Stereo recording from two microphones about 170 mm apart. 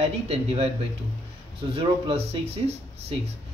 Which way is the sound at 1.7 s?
35° right (ahead or behind).